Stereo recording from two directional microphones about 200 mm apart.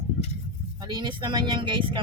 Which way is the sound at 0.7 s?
20° right (ahead or behind).